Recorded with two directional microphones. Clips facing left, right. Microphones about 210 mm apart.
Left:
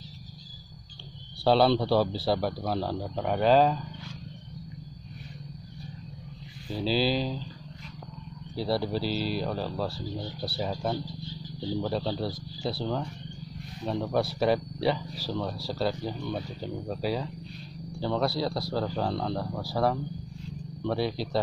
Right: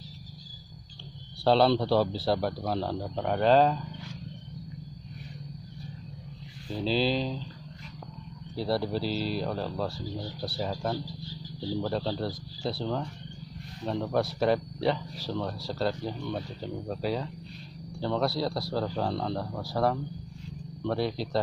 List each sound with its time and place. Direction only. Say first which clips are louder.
1.4 s speech: even; 5° left (ahead or behind)
6.7 s speech: left 1 dB; 5° left (ahead or behind)
8.5 s speech: even; centre (ahead or behind)
10.9 s a sound: left 1 dB; 20° left (ahead or behind)
11.9 s speech: even; centre (ahead or behind)